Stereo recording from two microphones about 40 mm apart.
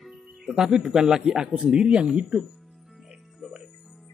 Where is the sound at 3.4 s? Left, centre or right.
Centre.